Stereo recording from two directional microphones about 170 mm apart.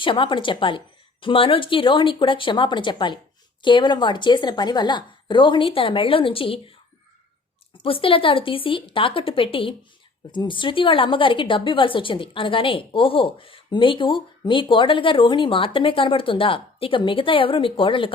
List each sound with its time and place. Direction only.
0.0 s a woman's voice: 30° left (ahead or behind)